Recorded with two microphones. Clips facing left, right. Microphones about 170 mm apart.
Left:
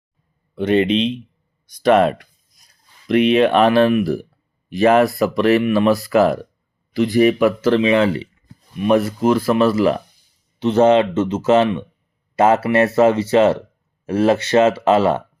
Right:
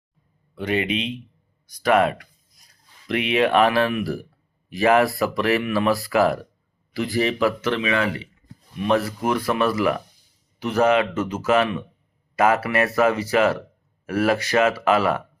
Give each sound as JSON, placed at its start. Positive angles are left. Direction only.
{"t": 0.5, "sound": "speech", "side_deg": 25}
{"t": 3.3, "sound": "speech", "side_deg": 25}
{"t": 7.6, "sound": "speech", "side_deg": 30}